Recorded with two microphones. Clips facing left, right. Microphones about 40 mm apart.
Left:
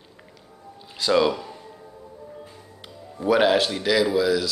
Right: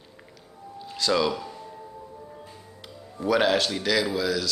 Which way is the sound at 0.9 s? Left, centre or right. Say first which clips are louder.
Left 4 dB; centre.